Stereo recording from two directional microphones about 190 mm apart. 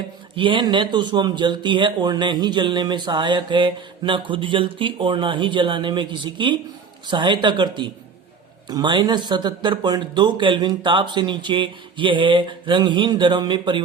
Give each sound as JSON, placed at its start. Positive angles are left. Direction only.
{"t": 0.3, "sound": "speech", "side_deg": -25}